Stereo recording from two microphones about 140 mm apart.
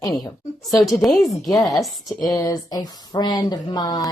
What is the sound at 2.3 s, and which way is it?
Speech, 30° left (ahead or behind).